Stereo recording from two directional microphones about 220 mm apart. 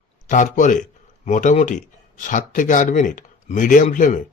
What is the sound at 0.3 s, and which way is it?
A man's voice, 35° left (ahead or behind).